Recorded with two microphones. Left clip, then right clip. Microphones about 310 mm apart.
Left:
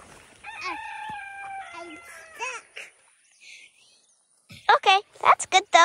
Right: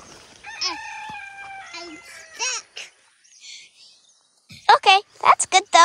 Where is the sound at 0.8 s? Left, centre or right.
Left.